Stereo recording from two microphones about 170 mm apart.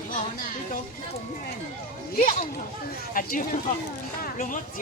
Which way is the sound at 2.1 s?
50° left (ahead or behind).